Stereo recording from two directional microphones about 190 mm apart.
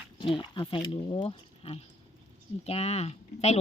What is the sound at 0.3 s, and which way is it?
Speech, 25° left (ahead or behind).